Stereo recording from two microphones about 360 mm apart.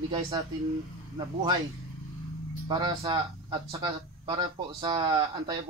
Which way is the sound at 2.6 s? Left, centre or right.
Centre.